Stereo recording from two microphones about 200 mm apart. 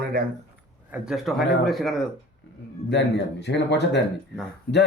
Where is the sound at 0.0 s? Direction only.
45° right (ahead or behind).